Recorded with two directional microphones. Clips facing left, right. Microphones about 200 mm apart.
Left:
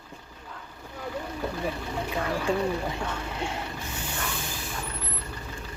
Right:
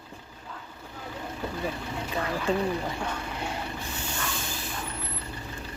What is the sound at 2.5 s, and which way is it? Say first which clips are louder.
Speech: right 1 dB; 10° left (ahead or behind).